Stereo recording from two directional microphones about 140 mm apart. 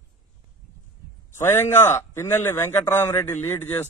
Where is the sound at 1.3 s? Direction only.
20° left (ahead or behind).